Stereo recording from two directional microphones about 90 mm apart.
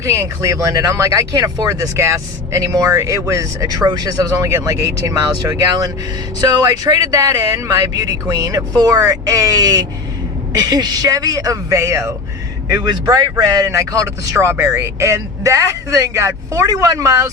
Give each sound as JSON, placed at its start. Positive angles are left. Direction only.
{"t": 0.0, "sound": "speech", "side_deg": -35}
{"t": 1.3, "sound": "a man's voice", "side_deg": -45}
{"t": 12.7, "sound": "speech", "side_deg": -50}